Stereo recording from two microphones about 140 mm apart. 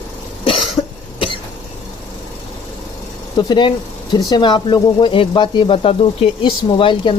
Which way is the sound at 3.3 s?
35° left (ahead or behind).